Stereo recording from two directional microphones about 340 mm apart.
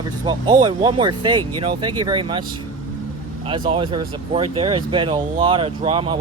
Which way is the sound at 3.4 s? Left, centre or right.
Centre.